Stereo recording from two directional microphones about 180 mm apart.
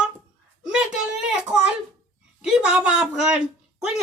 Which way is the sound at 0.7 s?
5° right (ahead or behind).